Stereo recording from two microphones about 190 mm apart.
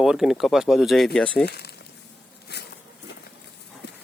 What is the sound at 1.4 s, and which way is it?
Speech, 60° left (ahead or behind).